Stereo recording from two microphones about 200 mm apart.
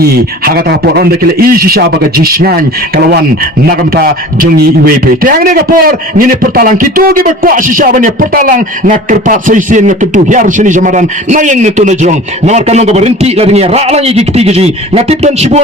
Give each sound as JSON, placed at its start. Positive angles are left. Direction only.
{"t": 0.0, "sound": "a man's voice", "side_deg": -50}
{"t": 3.7, "sound": "a man's voice", "side_deg": -50}